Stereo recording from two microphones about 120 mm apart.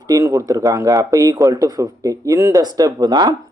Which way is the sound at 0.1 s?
25° right (ahead or behind).